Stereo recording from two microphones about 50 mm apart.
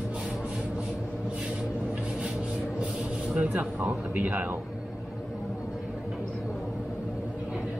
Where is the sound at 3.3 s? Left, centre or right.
Right.